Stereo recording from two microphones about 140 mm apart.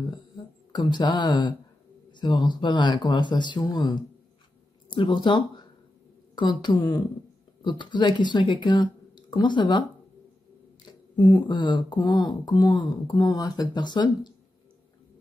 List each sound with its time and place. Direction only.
0.7 s speech: 30° left (ahead or behind)
10.9 s speech: 30° left (ahead or behind)